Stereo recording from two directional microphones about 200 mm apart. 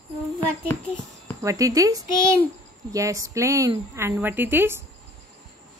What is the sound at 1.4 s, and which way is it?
A woman's voice, 15° right (ahead or behind).